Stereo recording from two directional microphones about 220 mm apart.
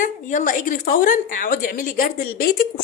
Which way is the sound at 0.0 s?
35° left (ahead or behind).